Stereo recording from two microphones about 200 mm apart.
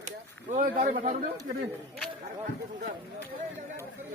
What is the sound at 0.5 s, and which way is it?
Speech, 45° right (ahead or behind).